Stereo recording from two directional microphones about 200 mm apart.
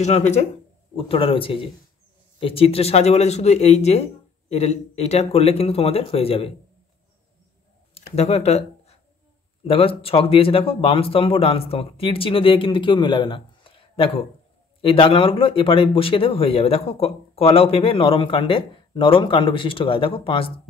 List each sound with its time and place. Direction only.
0.0 s speech: 35° left (ahead or behind)
7.9 s a sound: 35° left (ahead or behind)
9.7 s speech: 30° left (ahead or behind)